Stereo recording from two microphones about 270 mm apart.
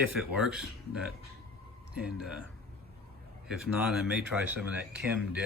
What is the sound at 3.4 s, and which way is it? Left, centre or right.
Speech, centre.